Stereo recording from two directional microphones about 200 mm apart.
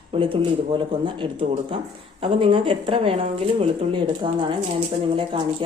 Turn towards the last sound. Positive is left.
turn(degrees=-25)  # may be behind; listen again after turning